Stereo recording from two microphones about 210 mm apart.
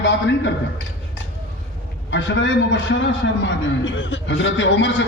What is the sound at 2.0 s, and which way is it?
A man's voice, 60° left (ahead or behind).